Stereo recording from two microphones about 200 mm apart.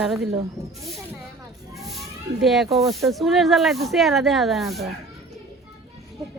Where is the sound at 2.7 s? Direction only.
Centre (ahead or behind).